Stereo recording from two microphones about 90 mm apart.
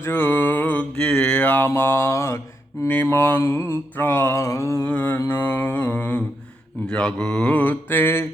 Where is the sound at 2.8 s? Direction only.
20° left (ahead or behind).